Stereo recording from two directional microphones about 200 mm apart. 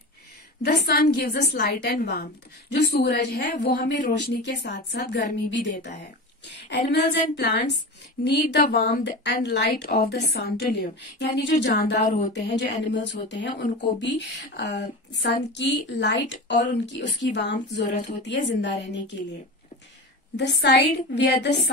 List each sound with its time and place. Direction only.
0.6 s a woman's voice: 55° left (ahead or behind)
12.5 s speech: 60° left (ahead or behind)
20.3 s speech: 60° left (ahead or behind)